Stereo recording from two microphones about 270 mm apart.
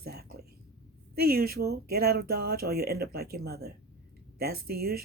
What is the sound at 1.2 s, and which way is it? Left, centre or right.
Speech, right.